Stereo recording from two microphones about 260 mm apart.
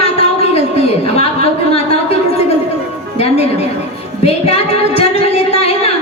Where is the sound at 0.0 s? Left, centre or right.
Left.